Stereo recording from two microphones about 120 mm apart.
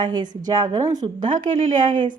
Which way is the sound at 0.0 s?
35° right (ahead or behind).